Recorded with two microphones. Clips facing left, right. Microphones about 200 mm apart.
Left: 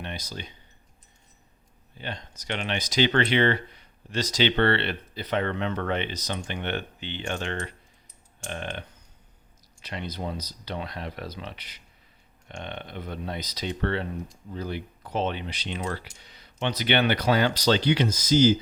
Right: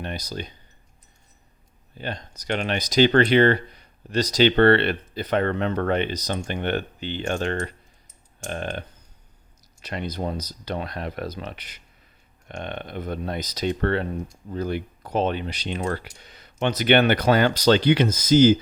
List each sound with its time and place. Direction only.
0.0 s speech: 40° right (ahead or behind)
2.0 s speech: 40° right (ahead or behind)
9.8 s speech: 45° right (ahead or behind)